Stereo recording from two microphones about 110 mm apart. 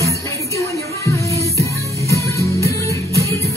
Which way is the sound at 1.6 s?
25° left (ahead or behind).